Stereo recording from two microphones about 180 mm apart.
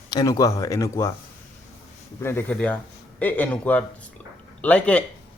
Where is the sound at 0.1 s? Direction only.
20° left (ahead or behind).